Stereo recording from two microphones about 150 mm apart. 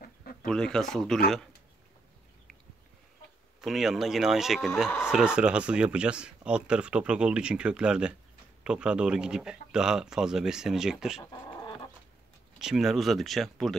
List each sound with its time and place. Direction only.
0.0 s a sound: 70° left (ahead or behind)
0.5 s speech: 5° left (ahead or behind)
3.6 s speech: centre (ahead or behind)
12.5 s speech: 5° right (ahead or behind)